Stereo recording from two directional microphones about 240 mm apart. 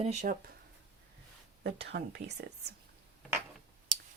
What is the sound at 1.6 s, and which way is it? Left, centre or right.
Speech, right.